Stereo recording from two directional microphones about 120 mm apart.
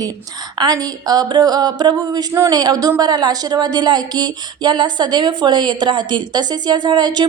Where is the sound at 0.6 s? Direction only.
30° right (ahead or behind).